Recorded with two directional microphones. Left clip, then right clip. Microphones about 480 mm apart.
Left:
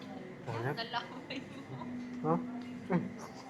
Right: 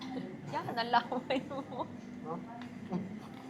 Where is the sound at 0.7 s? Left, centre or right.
Right.